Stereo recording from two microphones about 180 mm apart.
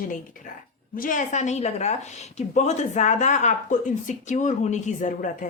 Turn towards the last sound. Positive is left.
turn(degrees=45)  # may be behind; listen again after turning